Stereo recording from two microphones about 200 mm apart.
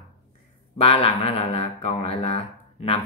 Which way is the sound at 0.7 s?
30° left (ahead or behind).